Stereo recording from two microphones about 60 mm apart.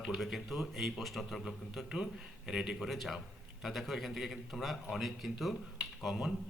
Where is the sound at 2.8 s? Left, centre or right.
Centre.